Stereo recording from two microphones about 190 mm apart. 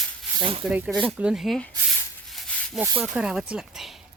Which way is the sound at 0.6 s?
5° right (ahead or behind).